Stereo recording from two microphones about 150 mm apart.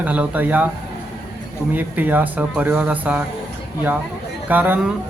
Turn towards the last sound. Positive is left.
turn(degrees=-10)  # may be behind; listen again after turning